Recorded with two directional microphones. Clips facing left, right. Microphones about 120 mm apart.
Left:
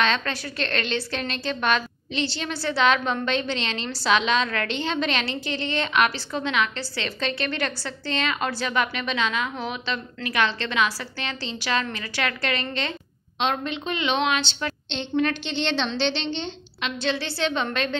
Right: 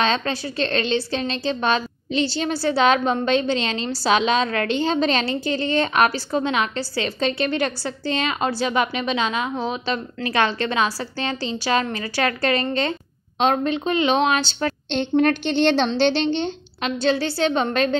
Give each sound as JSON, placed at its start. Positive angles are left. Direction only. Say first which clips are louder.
{"t": 0.0, "sound": "a woman's voice", "louder": "right 3 dB", "side_deg": -30}